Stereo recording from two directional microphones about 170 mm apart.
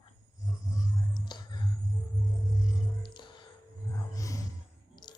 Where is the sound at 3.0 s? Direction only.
25° left (ahead or behind).